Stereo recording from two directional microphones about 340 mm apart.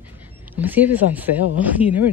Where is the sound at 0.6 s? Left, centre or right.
Centre.